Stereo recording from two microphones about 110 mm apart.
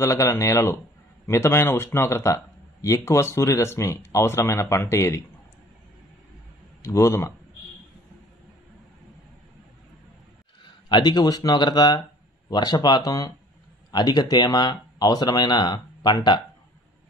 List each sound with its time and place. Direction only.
0.0 s speech: 30° left (ahead or behind)
6.8 s speech: 25° left (ahead or behind)
10.9 s speech: 40° left (ahead or behind)